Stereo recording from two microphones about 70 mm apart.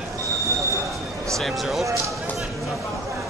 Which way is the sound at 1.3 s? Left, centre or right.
Centre.